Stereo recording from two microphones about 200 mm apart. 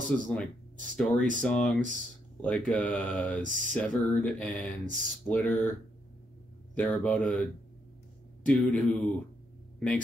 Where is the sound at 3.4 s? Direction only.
40° right (ahead or behind).